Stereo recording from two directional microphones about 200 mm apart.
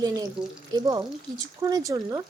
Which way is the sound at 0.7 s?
20° right (ahead or behind).